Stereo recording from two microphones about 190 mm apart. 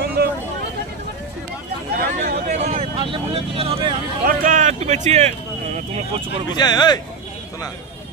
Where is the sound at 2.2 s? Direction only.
40° right (ahead or behind).